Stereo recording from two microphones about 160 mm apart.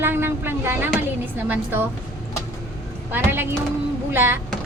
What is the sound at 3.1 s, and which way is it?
A woman's voice, 15° right (ahead or behind).